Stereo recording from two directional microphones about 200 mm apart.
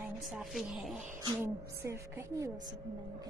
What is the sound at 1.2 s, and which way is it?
A woman's voice, 15° right (ahead or behind).